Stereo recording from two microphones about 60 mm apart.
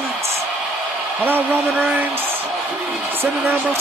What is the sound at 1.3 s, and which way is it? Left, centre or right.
Speech, right.